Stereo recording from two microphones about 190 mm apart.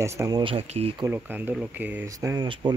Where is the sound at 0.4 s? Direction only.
30° right (ahead or behind).